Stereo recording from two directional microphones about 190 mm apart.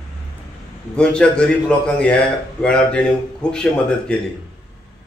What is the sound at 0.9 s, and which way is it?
A man's voice, 5° left (ahead or behind).